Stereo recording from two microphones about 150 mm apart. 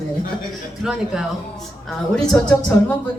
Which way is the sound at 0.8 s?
5° right (ahead or behind).